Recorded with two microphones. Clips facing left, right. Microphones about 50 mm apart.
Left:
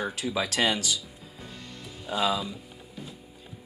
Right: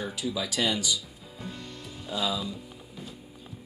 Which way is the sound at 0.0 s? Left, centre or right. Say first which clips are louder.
Left 2 dB; left.